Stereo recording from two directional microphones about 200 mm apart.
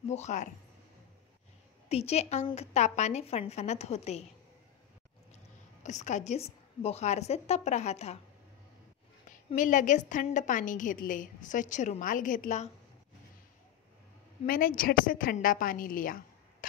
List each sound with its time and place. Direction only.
0.1 s a woman's voice: 35° left (ahead or behind)
1.9 s a woman's voice: 30° left (ahead or behind)
5.3 s a woman's voice: 35° left (ahead or behind)
9.6 s a woman's voice: 40° left (ahead or behind)
14.4 s a woman's voice: 45° left (ahead or behind)